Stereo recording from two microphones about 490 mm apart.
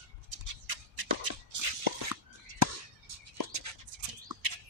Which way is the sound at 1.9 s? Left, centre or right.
Right.